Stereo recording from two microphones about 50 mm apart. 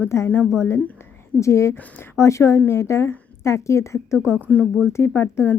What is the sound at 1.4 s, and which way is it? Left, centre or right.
A woman's voice, left.